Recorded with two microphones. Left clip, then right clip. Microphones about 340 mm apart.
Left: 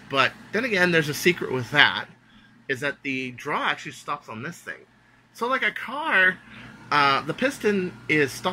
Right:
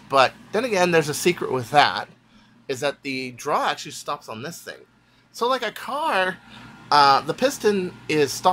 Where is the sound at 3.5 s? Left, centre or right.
Centre.